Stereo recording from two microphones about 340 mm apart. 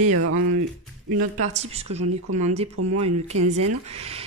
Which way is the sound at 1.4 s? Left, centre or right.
Centre.